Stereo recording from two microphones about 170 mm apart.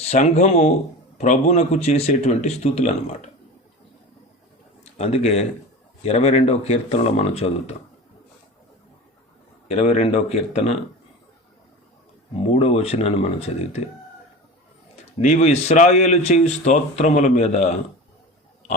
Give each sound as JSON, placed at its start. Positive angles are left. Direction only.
{"t": 0.0, "sound": "speech", "side_deg": 40}
{"t": 4.9, "sound": "speech", "side_deg": 40}
{"t": 9.6, "sound": "speech", "side_deg": 40}
{"t": 12.4, "sound": "speech", "side_deg": 40}
{"t": 15.2, "sound": "speech", "side_deg": 40}